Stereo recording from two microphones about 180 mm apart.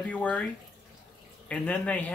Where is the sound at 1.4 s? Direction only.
5° left (ahead or behind).